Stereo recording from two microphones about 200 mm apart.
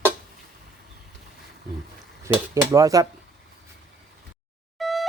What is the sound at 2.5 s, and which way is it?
Cutlery, 15° right (ahead or behind).